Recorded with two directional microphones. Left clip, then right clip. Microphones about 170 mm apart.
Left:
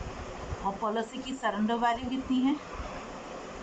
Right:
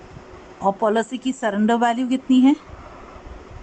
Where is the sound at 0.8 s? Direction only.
60° right (ahead or behind).